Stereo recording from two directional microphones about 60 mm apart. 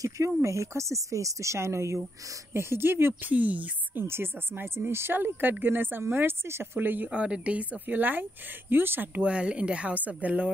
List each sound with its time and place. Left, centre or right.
0.4 s speech: right
4.0 s speech: right
7.1 s speech: centre
7.8 s speech: right
9.2 s speech: centre